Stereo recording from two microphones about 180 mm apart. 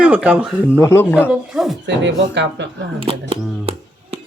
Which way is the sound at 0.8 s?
15° left (ahead or behind).